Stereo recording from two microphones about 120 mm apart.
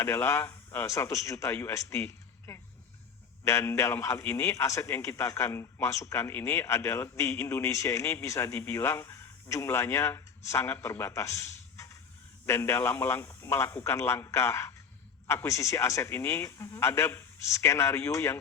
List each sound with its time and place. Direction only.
0.0 s a man's voice: 20° left (ahead or behind)